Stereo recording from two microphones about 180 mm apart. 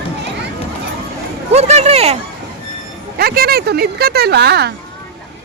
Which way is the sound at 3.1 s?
60° right (ahead or behind).